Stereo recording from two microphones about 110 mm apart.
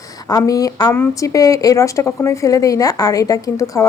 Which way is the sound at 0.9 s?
25° left (ahead or behind).